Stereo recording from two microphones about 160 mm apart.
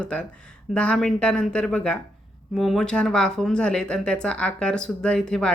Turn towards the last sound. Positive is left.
turn(degrees=5)  # may be behind; listen again after turning